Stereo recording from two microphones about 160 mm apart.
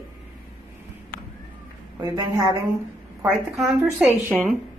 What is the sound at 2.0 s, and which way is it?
Speech, 20° right (ahead or behind).